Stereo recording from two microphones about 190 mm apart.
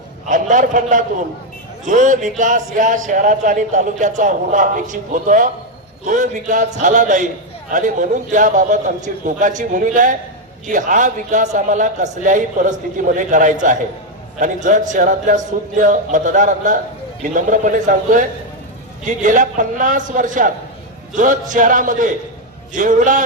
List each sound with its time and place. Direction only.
0.3 s a man's voice: 45° right (ahead or behind)